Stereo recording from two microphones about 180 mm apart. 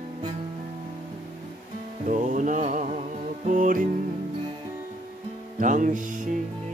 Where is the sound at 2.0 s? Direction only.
45° right (ahead or behind).